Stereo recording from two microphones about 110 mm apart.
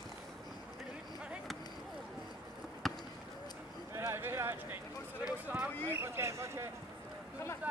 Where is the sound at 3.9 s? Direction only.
25° right (ahead or behind).